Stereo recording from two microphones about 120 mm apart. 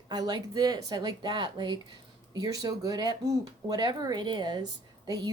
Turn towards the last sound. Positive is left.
turn(degrees=-35)  # may be behind; listen again after turning